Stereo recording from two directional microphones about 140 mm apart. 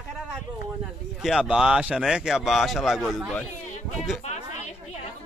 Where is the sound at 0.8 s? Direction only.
5° right (ahead or behind).